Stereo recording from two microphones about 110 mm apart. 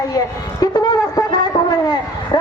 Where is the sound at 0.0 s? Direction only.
35° left (ahead or behind).